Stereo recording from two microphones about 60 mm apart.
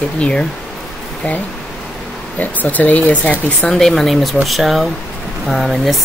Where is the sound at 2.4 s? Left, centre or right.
Left.